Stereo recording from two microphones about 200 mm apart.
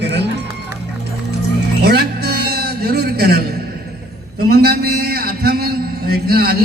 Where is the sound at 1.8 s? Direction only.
55° right (ahead or behind).